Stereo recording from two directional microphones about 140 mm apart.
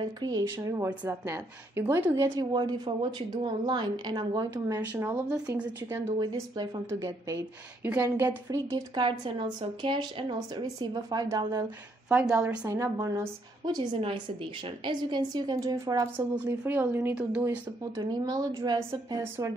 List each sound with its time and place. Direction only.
0.0 s a woman's voice: 30° right (ahead or behind); by 5.9 s 15° right (ahead or behind)
6.1 s a woman's voice: 30° right (ahead or behind)
8.5 s speech: 30° right (ahead or behind)
12.1 s speech: 5° right (ahead or behind)
12.6 s a woman's voice: 20° right (ahead or behind)
13.7 s speech: 35° right (ahead or behind)
16.4 s speech: 15° right (ahead or behind)
18.0 s a woman's voice: 25° right (ahead or behind)